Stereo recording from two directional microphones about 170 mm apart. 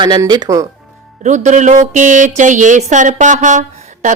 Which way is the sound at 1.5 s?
45° right (ahead or behind).